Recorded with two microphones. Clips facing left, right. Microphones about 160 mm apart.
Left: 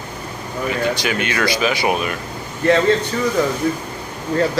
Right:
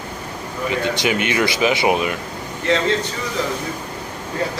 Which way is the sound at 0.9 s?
20° right (ahead or behind).